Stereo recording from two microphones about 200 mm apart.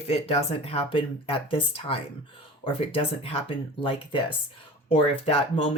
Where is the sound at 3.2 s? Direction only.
30° left (ahead or behind).